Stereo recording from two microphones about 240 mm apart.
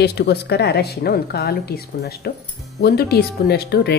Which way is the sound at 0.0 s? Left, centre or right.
Left.